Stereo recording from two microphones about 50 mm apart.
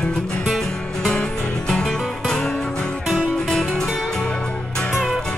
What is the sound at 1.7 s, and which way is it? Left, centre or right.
Music, centre.